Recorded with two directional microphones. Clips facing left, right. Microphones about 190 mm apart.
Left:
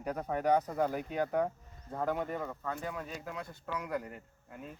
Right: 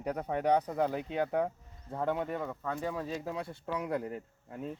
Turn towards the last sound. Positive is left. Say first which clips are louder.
# right 7 dB
turn(degrees=-30)  # may be behind; listen again after turning